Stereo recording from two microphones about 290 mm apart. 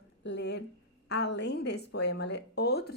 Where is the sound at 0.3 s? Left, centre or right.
Left.